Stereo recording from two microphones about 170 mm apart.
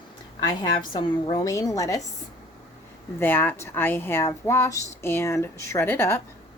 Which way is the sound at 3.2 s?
10° left (ahead or behind).